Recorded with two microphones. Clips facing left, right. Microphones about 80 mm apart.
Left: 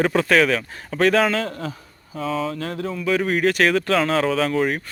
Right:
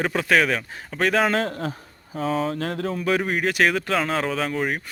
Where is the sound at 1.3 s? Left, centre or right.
Right.